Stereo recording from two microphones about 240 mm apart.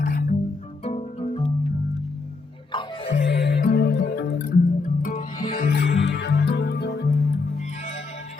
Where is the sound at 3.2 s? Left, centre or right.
Left.